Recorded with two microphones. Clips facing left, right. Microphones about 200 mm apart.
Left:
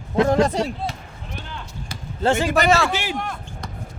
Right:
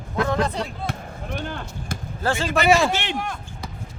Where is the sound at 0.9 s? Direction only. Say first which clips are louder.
Right 5 dB; 55° right (ahead or behind).